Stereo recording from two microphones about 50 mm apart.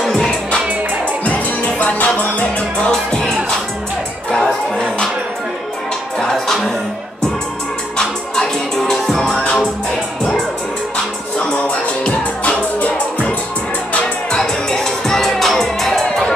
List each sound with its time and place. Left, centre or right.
1.2 s music: left
2.9 s music: centre
6.1 s music: centre
8.0 s music: centre
12.1 s music: left
14.0 s music: centre